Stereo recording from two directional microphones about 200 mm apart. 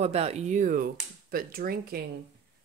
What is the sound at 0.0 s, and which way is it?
Speech, 30° right (ahead or behind).